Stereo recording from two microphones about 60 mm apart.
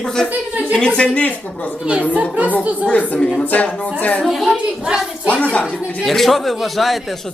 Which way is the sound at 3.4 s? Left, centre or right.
Left.